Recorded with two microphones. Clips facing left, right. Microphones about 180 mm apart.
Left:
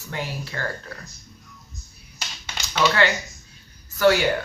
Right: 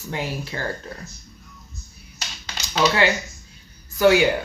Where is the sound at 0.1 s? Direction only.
20° right (ahead or behind).